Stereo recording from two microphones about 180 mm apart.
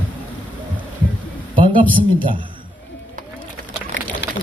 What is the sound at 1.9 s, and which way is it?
Speech, 30° right (ahead or behind).